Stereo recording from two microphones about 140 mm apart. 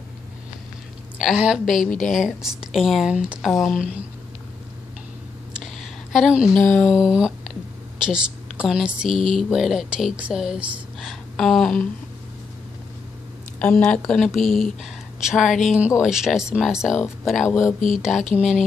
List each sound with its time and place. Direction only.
1.1 s speech: 5° right (ahead or behind)
1.8 s a woman's voice: 65° left (ahead or behind)
2.1 s speech: 5° right (ahead or behind)
5.6 s a sound: centre (ahead or behind)
7.0 s a woman's voice: 5° right (ahead or behind)
13.6 s speech: 10° left (ahead or behind)
16.9 s speech: 20° left (ahead or behind)
17.7 s a sound: 70° left (ahead or behind)